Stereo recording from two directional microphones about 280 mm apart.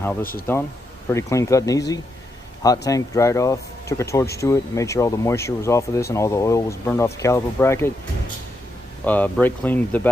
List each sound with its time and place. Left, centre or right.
0.2 s speech: left
1.1 s speech: centre
9.0 s speech: centre